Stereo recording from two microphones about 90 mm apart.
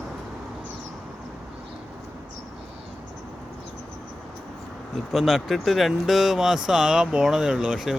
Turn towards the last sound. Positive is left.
turn(degrees=-5)  # may be behind; listen again after turning